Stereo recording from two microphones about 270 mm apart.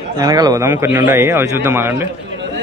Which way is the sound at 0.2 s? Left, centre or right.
Centre.